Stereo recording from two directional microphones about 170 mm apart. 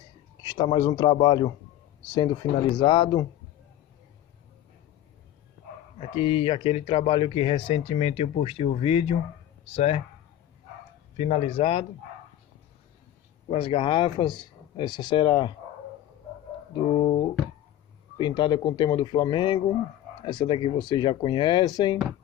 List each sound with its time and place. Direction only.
0.4 s speech: 25° left (ahead or behind)
5.9 s speech: 35° left (ahead or behind)
11.1 s speech: 35° left (ahead or behind)
13.5 s speech: 35° left (ahead or behind)
16.7 s a sound: 30° left (ahead or behind)
18.1 s speech: 25° left (ahead or behind)